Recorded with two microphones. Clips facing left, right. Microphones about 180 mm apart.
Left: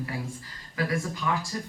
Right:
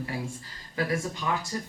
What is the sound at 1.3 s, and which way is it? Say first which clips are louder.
Speech: left 1 dB; 25° right (ahead or behind).